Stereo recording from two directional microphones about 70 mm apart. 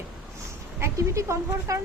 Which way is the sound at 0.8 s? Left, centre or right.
Right.